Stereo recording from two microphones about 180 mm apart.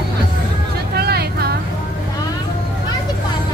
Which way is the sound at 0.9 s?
60° right (ahead or behind).